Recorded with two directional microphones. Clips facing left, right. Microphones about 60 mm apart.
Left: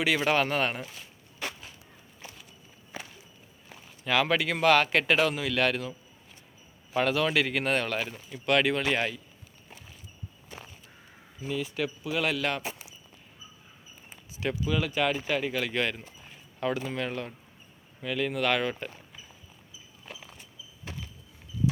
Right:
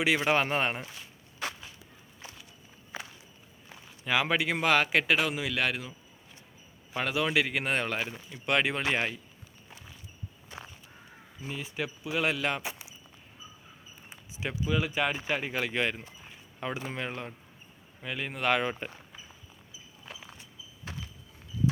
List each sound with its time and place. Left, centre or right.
0.0 s speech: centre
4.0 s a man's voice: centre
6.9 s a man's voice: centre
11.4 s speech: right
14.3 s speech: centre